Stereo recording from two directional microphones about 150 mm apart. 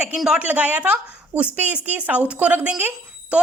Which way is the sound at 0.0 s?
5° right (ahead or behind).